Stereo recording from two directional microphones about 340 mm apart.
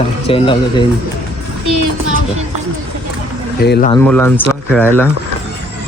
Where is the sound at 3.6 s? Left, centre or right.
Left.